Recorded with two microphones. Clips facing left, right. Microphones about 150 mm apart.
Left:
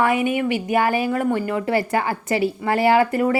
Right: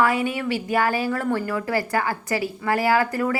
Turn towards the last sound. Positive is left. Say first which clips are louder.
# left 4 dB
turn(degrees=20)  # may be behind; listen again after turning